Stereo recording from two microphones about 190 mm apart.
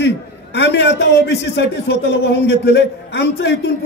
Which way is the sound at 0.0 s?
65° left (ahead or behind).